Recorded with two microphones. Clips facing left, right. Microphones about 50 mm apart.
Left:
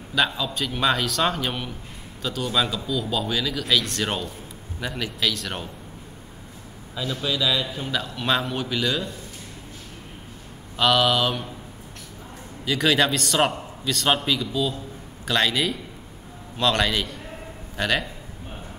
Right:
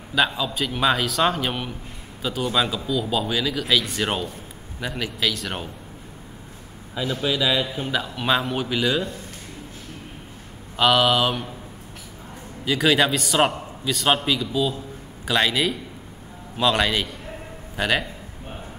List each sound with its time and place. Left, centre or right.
0.1 s speech: centre
7.0 s speech: centre
10.8 s speech: centre
12.6 s speech: centre